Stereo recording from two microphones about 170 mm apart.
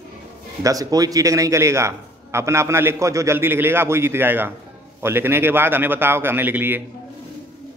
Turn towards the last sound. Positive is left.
turn(degrees=-10)  # may be behind; listen again after turning